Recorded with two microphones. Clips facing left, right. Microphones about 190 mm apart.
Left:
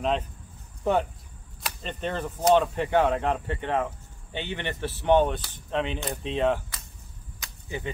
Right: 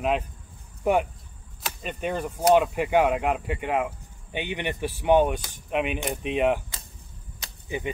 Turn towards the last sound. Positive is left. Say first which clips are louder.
# right 3 dB
turn(degrees=-15)  # may be behind; listen again after turning